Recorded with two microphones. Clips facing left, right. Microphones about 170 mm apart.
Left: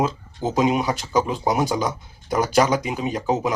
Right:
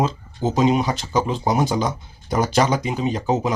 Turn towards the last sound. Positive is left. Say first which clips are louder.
# right 1 dB
turn(degrees=5)  # may be behind; listen again after turning